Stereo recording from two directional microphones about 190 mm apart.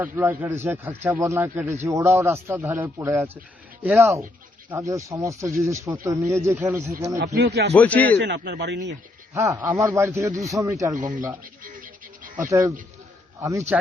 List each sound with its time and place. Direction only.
0.0 s speech: 10° right (ahead or behind)
7.3 s speech: 60° right (ahead or behind)
7.7 s a man's voice: 10° left (ahead or behind)
8.2 s speech: 65° right (ahead or behind)
9.3 s speech: 15° right (ahead or behind)
10.9 s speech: 45° right (ahead or behind)
11.6 s goat: 45° right (ahead or behind)
12.5 s speech: 15° right (ahead or behind)